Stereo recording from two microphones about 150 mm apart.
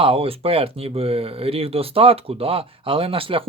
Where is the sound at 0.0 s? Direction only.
40° right (ahead or behind).